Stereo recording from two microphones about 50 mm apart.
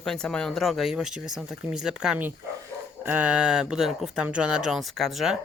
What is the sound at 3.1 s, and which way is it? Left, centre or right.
Speech, right.